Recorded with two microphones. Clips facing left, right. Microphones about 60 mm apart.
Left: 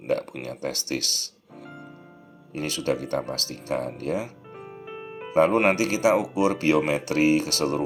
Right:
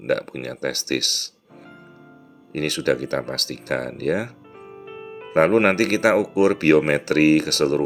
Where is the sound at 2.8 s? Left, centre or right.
Right.